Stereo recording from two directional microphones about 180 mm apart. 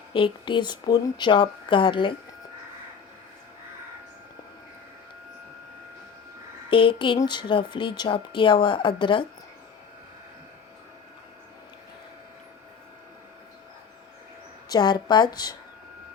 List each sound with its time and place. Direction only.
0.1 s a woman's voice: 25° left (ahead or behind)
6.7 s a woman's voice: 30° left (ahead or behind)
14.7 s a woman's voice: 25° left (ahead or behind)